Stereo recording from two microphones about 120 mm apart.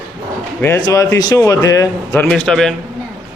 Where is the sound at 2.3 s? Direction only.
5° left (ahead or behind).